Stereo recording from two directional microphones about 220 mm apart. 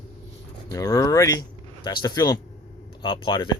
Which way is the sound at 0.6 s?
15° left (ahead or behind).